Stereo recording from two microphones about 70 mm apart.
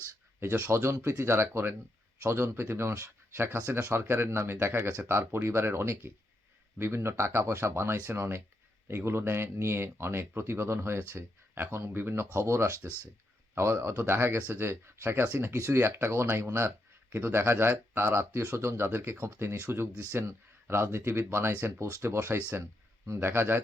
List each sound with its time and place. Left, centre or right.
0.3 s speech: right